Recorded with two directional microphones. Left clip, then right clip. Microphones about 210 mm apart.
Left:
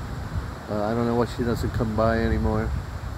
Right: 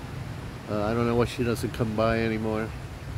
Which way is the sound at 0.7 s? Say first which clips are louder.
Left 1 dB; 5° right (ahead or behind).